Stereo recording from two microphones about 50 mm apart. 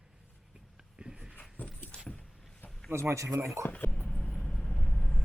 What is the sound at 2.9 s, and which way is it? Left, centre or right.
Speech, right.